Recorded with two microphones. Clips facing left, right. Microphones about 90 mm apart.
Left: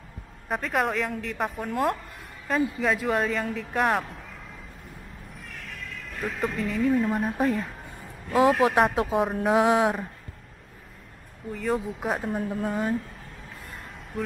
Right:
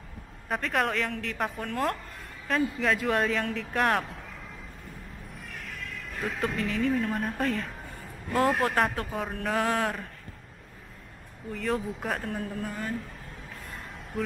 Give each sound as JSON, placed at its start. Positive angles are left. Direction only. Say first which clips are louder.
{"t": 0.5, "sound": "speech", "louder": "left 2 dB", "side_deg": 5}
{"t": 6.1, "sound": "speech", "louder": "left 1 dB", "side_deg": 0}
{"t": 11.5, "sound": "speech", "louder": "left 2 dB", "side_deg": 0}
{"t": 12.6, "sound": "speech", "louder": "left 7 dB", "side_deg": 25}
{"t": 13.7, "sound": "a sound", "louder": "even", "side_deg": 0}